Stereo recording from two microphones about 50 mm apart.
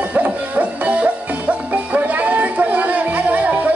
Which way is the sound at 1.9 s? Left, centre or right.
Right.